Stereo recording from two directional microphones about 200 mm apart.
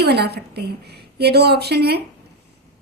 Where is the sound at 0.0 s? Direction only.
55° right (ahead or behind).